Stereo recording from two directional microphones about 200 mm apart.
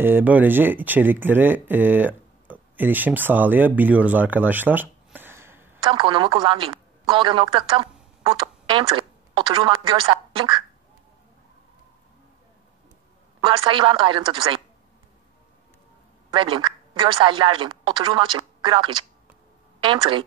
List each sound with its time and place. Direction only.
0.0 s speech: 10° right (ahead or behind)
5.9 s speech: 25° right (ahead or behind)
13.4 s speech: 25° right (ahead or behind)
16.3 s speech: 25° right (ahead or behind)